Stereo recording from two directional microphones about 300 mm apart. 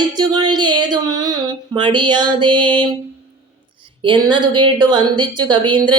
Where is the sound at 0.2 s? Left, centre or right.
Centre.